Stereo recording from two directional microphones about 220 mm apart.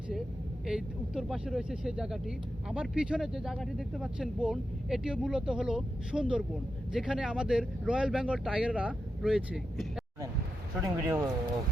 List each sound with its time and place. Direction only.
0.6 s speech: centre (ahead or behind)
10.8 s speech: 15° right (ahead or behind)